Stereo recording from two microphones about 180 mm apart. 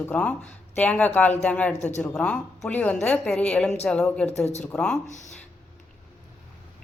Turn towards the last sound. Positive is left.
turn(degrees=40)  # may be behind; listen again after turning